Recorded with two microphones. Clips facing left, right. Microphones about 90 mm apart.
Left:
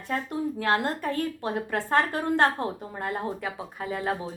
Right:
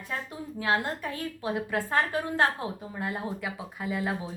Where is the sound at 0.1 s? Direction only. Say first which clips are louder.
Left 8 dB; 50° left (ahead or behind).